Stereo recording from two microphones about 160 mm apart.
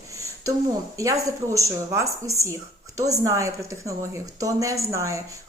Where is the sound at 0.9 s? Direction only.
20° right (ahead or behind).